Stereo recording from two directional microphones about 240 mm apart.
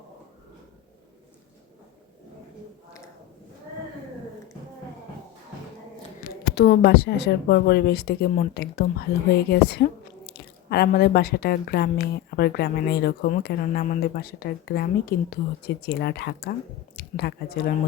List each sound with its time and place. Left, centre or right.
6.5 s speech: left